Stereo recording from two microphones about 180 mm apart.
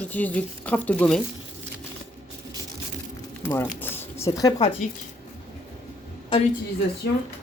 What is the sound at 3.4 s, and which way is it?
Speech, 10° left (ahead or behind).